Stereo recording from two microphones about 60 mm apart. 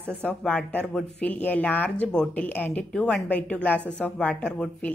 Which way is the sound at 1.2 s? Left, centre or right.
Left.